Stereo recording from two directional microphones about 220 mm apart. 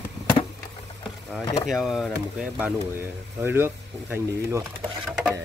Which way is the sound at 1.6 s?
Centre (ahead or behind).